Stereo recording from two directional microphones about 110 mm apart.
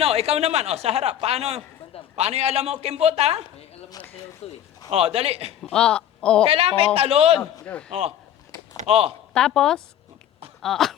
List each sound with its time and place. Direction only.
0.0 s speech: 70° right (ahead or behind)
4.0 s speech: 35° left (ahead or behind)
4.4 s speech: 65° left (ahead or behind)
4.9 s a man's voice: 65° right (ahead or behind)
5.7 s speech: 5° left (ahead or behind)
6.5 s a man's voice: 60° right (ahead or behind)
7.6 s a man's voice: 10° left (ahead or behind)
8.9 s a man's voice: 60° right (ahead or behind)
9.3 s a woman's voice: 5° left (ahead or behind)